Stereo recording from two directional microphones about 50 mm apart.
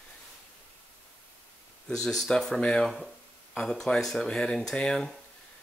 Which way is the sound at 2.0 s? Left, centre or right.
Centre.